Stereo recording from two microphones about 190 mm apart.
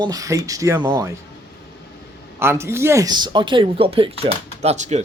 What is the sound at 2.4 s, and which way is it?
Speech, 15° right (ahead or behind).